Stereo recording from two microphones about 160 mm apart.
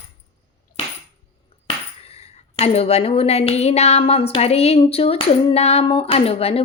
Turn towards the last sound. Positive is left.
turn(degrees=40)  # may be behind; listen again after turning